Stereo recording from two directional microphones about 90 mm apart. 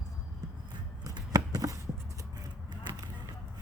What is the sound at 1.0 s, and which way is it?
Shuffling cards, 45° right (ahead or behind).